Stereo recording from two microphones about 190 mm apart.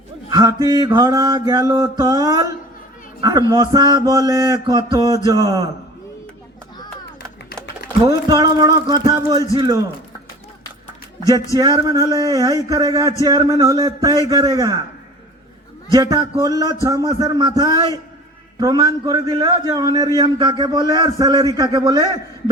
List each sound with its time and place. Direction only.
0.3 s mantra: 20° right (ahead or behind)
3.2 s a woman's voice: 20° right (ahead or behind)
3.5 s mantra: 20° right (ahead or behind)
8.0 s mantra: 20° right (ahead or behind)
11.5 s mantra: 20° right (ahead or behind)
15.9 s mantra: 20° right (ahead or behind)